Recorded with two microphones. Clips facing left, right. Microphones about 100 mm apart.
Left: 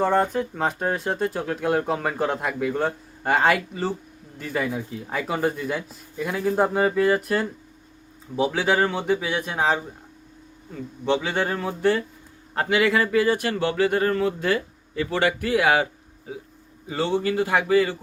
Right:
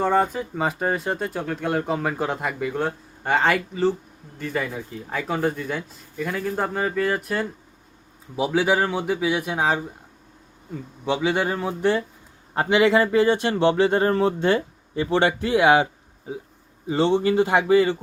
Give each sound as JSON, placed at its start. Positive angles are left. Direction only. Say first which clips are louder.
{"t": 0.0, "sound": "speech", "louder": "even", "side_deg": 0}
{"t": 11.0, "sound": "speech", "louder": "right 1 dB", "side_deg": -10}